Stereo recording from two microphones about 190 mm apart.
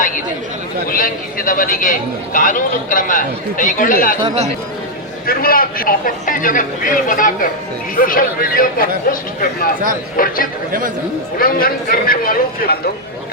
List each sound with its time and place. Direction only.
0.9 s a man's voice: 45° left (ahead or behind)
4.2 s speech: 35° right (ahead or behind)
5.2 s a man's voice: 50° left (ahead or behind)
10.7 s speech: 45° right (ahead or behind)
11.3 s a man's voice: 50° left (ahead or behind)